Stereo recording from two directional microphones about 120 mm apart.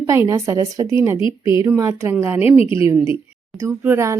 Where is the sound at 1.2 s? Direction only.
45° left (ahead or behind).